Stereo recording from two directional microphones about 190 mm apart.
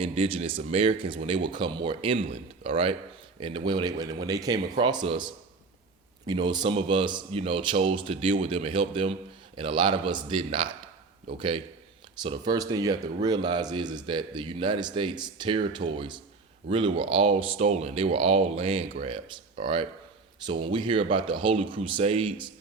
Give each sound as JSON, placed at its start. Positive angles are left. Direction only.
{"t": 0.0, "sound": "speech", "side_deg": -30}